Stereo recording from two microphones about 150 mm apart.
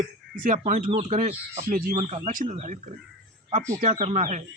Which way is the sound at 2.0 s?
50° right (ahead or behind).